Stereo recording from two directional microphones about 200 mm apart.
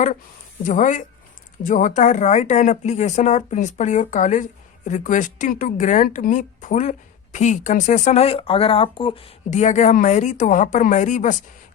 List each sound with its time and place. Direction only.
0.6 s speech: 40° left (ahead or behind)